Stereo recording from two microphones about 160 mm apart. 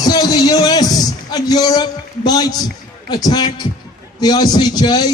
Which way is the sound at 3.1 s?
25° left (ahead or behind).